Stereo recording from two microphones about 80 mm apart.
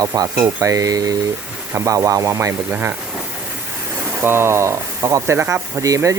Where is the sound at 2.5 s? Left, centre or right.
Right.